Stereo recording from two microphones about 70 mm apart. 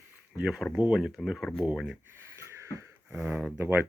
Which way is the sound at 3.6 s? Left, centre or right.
Right.